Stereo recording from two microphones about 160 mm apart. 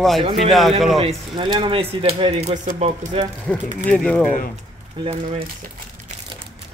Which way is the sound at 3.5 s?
5° left (ahead or behind).